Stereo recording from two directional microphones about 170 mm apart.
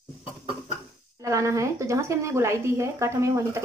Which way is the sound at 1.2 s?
20° right (ahead or behind).